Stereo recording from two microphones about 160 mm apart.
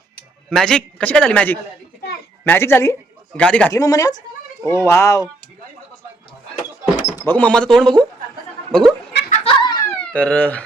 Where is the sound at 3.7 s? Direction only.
20° left (ahead or behind).